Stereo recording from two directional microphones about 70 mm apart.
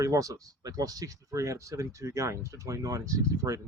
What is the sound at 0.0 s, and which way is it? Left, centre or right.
Speech, right.